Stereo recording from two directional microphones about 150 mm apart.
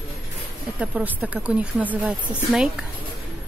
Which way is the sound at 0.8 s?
5° right (ahead or behind).